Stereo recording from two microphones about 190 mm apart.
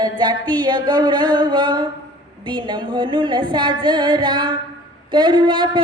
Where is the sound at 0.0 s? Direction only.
25° right (ahead or behind).